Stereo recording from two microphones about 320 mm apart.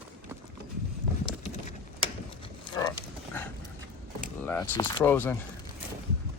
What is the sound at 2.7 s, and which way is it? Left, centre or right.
Pig, centre.